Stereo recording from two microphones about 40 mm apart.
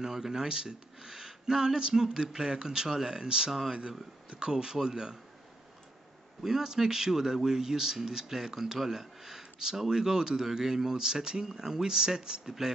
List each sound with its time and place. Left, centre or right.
0.0 s speech: centre
6.4 s speech: centre